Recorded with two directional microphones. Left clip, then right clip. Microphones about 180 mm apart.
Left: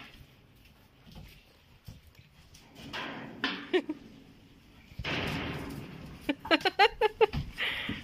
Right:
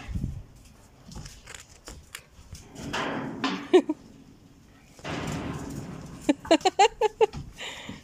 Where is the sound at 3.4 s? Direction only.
15° right (ahead or behind).